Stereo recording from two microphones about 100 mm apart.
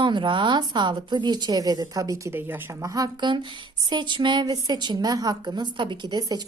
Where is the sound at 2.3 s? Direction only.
20° right (ahead or behind).